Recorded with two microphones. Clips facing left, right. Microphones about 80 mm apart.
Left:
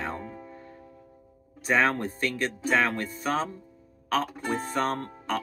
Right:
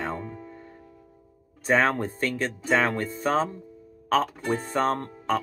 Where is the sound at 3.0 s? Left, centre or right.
Right.